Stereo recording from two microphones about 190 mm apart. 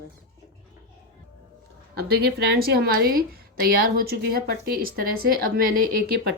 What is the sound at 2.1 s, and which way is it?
A woman's voice, 55° right (ahead or behind).